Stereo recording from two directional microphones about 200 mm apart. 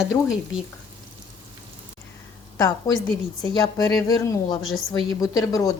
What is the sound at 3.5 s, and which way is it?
A woman's voice, 20° left (ahead or behind).